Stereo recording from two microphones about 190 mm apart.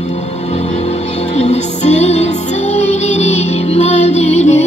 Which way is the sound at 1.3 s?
35° left (ahead or behind).